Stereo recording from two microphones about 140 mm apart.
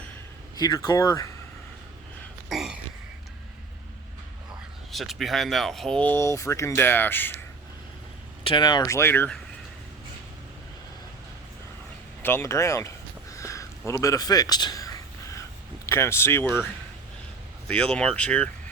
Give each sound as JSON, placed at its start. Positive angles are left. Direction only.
{"t": 0.5, "sound": "speech", "side_deg": 30}
{"t": 2.5, "sound": "a sound", "side_deg": 0}
{"t": 4.9, "sound": "speech", "side_deg": 0}
{"t": 8.4, "sound": "speech", "side_deg": 35}
{"t": 8.8, "sound": "speech", "side_deg": 20}
{"t": 12.2, "sound": "speech", "side_deg": 15}
{"t": 13.3, "sound": "a sound", "side_deg": 20}
{"t": 15.9, "sound": "speech", "side_deg": 20}
{"t": 17.7, "sound": "speech", "side_deg": 5}